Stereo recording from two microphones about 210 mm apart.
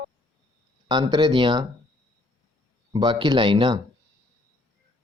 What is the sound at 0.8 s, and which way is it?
Speech, 20° right (ahead or behind).